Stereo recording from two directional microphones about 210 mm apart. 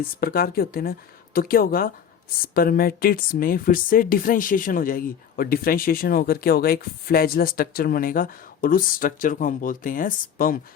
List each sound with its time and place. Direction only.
0.2 s speech: 45° left (ahead or behind)